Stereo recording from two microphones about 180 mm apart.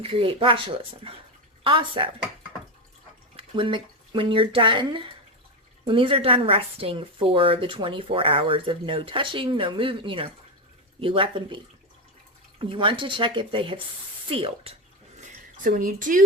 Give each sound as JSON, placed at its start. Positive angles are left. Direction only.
{"t": 0.0, "sound": "a woman's voice", "side_deg": -30}
{"t": 3.3, "sound": "a woman's voice", "side_deg": -30}
{"t": 15.2, "sound": "a sound", "side_deg": -50}